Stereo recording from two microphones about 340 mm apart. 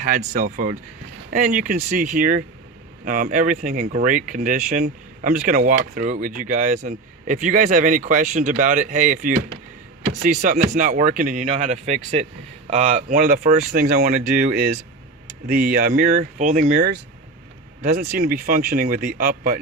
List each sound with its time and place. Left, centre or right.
0.0 s speech: right